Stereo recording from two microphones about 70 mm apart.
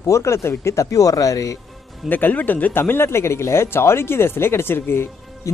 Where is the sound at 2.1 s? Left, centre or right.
Left.